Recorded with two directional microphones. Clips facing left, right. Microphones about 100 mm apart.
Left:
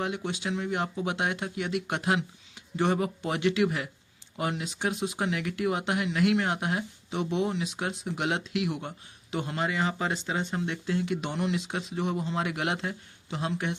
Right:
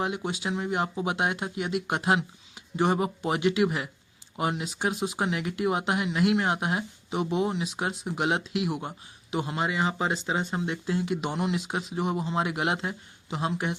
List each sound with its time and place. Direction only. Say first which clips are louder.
0.0 s speech: right 2 dB; 20° right (ahead or behind)